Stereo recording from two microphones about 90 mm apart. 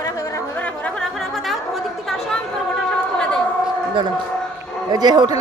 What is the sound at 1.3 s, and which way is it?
Chatter, centre (ahead or behind).